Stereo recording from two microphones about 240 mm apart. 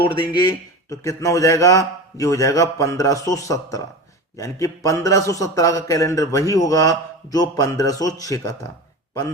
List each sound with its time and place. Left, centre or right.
0.0 s a man's voice: left